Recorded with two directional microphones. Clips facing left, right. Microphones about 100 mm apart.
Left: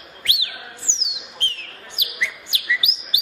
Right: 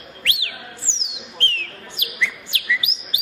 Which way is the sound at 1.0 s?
20° left (ahead or behind).